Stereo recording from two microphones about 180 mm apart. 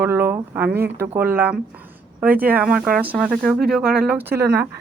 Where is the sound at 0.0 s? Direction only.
10° right (ahead or behind).